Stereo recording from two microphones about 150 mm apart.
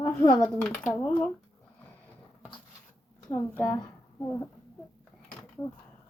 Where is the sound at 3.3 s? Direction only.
20° left (ahead or behind).